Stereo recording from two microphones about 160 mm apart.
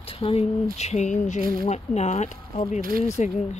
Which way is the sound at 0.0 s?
35° left (ahead or behind).